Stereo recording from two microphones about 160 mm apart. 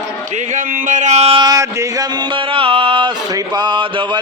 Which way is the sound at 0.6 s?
55° right (ahead or behind).